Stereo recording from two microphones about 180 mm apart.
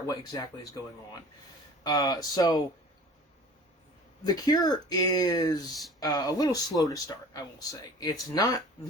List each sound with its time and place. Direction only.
0.1 s speech: 20° left (ahead or behind)
1.8 s speech: 20° left (ahead or behind)
4.3 s speech: 20° left (ahead or behind)